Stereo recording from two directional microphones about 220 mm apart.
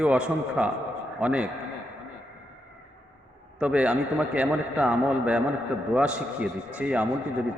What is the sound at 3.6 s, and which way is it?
A man's voice, 5° right (ahead or behind).